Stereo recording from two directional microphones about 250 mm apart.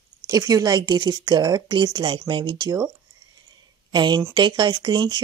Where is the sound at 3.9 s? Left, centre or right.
Centre.